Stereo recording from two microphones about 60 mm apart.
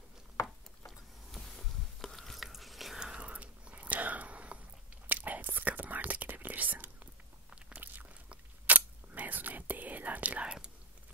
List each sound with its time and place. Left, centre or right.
0.4 s a sound: left
0.8 s biting: centre
3.0 s whispering: centre
7.7 s biting: right
8.3 s whispering: right